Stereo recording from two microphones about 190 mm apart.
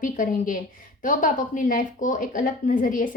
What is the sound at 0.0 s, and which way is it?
Speech, 45° left (ahead or behind).